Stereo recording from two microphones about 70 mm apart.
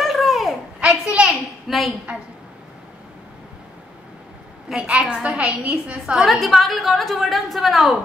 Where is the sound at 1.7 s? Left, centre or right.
Centre.